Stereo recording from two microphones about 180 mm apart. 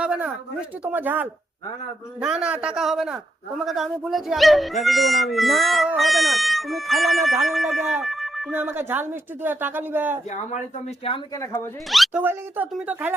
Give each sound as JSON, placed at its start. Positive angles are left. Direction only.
{"t": 0.0, "sound": "a sound", "side_deg": -5}
{"t": 0.9, "sound": "speech", "side_deg": -10}
{"t": 8.5, "sound": "speech", "side_deg": -10}
{"t": 11.1, "sound": "speech", "side_deg": 30}
{"t": 11.9, "sound": "speech", "side_deg": 0}
{"t": 12.2, "sound": "speech", "side_deg": -10}